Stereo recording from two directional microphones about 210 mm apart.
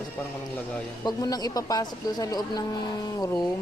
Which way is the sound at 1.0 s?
20° left (ahead or behind).